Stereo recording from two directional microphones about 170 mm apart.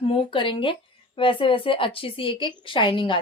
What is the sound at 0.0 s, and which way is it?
Speech, 30° left (ahead or behind).